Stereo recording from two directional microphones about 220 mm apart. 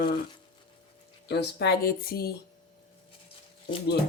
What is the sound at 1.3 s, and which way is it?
Speech, 50° left (ahead or behind).